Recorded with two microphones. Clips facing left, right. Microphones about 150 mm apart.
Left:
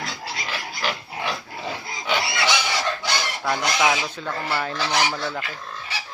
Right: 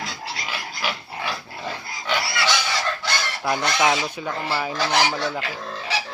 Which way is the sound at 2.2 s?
20° left (ahead or behind).